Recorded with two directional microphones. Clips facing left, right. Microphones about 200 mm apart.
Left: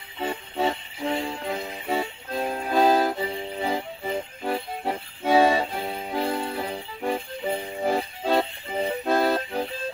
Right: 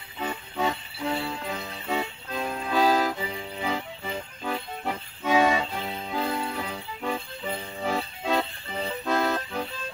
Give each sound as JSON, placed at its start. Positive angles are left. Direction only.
{"t": 0.2, "sound": "music", "side_deg": 30}
{"t": 5.8, "sound": "music", "side_deg": 10}
{"t": 6.0, "sound": "music", "side_deg": 35}